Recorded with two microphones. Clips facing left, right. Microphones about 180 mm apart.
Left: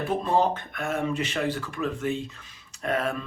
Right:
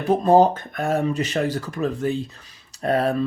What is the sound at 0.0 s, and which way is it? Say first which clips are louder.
Speech: right 8 dB; 40° right (ahead or behind).